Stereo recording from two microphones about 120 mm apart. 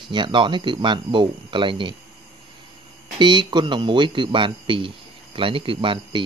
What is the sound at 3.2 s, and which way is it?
A man's voice, 40° right (ahead or behind).